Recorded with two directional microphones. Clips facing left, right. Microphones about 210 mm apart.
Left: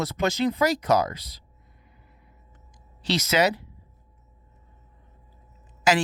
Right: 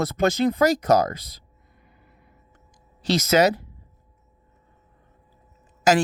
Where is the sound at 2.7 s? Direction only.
45° right (ahead or behind).